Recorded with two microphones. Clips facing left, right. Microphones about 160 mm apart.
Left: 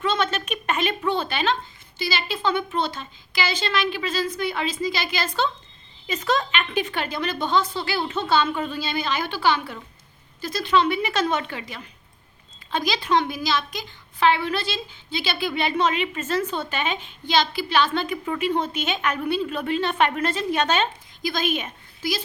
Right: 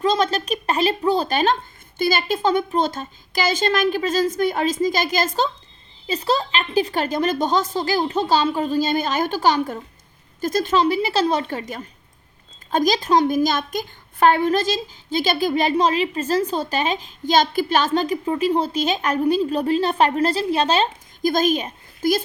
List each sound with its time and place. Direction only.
0.0 s a sound: 35° right (ahead or behind)
2.0 s a woman's voice: 50° right (ahead or behind); by 20.9 s 30° right (ahead or behind)
21.2 s a woman's voice: 45° right (ahead or behind)